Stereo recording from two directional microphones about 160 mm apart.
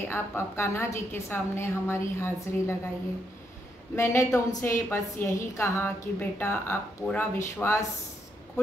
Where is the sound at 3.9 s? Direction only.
15° left (ahead or behind).